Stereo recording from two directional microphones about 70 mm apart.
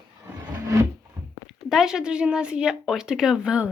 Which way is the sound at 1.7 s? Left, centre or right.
Centre.